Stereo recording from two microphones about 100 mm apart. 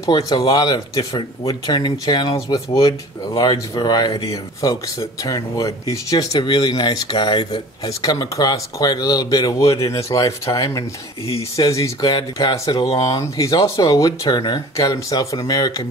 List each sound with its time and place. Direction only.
0.0 s speech: 35° left (ahead or behind)